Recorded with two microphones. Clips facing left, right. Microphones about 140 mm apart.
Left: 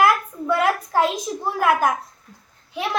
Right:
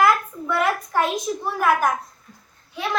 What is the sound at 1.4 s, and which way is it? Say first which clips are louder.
Speech: left 2 dB; 15° left (ahead or behind).